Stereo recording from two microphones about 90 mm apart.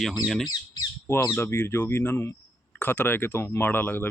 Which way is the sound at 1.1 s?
30° left (ahead or behind).